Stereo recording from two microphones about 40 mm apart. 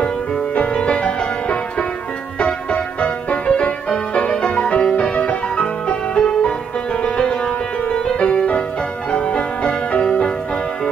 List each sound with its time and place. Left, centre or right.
0.6 s music: left